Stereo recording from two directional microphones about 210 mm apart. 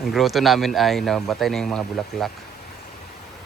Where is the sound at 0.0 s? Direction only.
Centre (ahead or behind).